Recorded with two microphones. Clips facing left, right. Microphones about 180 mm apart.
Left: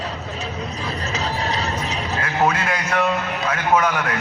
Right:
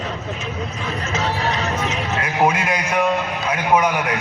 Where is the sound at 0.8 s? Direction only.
35° left (ahead or behind).